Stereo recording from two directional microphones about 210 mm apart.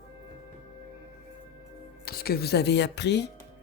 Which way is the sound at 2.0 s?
45° left (ahead or behind).